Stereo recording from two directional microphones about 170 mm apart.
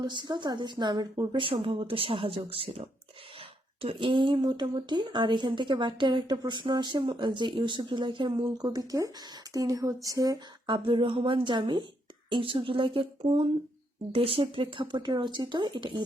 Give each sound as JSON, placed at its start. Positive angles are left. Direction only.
{"t": 0.0, "sound": "speech", "side_deg": -25}